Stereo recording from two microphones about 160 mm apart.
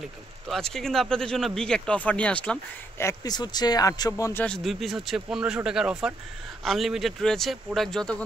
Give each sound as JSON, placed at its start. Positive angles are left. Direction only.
{"t": 0.5, "sound": "speech", "side_deg": 5}
{"t": 3.1, "sound": "speech", "side_deg": 25}
{"t": 4.5, "sound": "speech", "side_deg": 0}